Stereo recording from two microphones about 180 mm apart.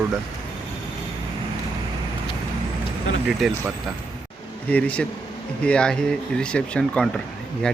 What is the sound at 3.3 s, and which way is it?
Speech, centre (ahead or behind).